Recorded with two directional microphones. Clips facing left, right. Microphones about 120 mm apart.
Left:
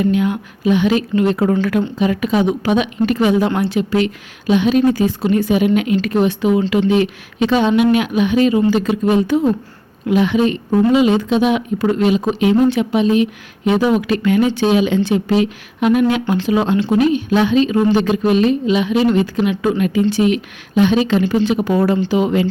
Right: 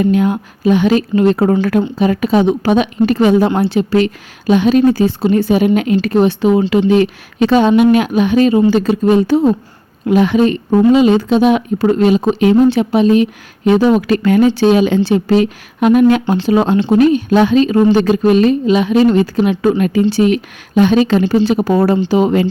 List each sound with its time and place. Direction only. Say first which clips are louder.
0.0 s a woman's voice: right 3 dB; 40° right (ahead or behind)
10.1 s a woman's voice: right 3 dB; 40° right (ahead or behind)